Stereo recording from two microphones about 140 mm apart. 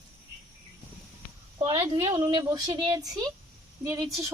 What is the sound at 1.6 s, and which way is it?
A woman's voice, 35° right (ahead or behind).